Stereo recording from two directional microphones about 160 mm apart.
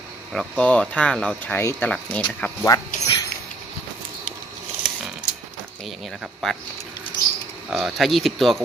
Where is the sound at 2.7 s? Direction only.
25° left (ahead or behind).